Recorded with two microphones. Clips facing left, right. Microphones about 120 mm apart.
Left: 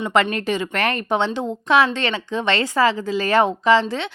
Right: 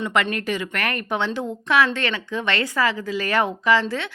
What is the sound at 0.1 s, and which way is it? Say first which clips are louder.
Speech: left 6 dB; 30° left (ahead or behind).